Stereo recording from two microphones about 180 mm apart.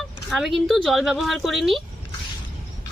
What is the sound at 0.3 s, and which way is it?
Speech, centre (ahead or behind).